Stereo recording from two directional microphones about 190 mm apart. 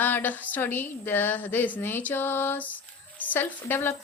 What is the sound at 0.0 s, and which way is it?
Speech, 10° left (ahead or behind).